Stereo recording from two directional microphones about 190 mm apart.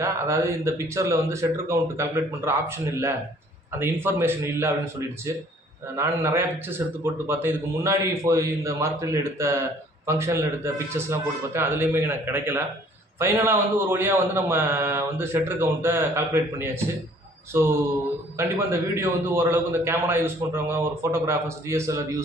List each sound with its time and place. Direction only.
0.0 s a man's voice: 15° right (ahead or behind)
5.9 s a man's voice: 15° right (ahead or behind)
17.5 s a man's voice: 15° right (ahead or behind)